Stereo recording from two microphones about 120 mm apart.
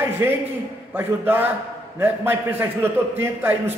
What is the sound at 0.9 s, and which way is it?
A man's voice, 15° right (ahead or behind).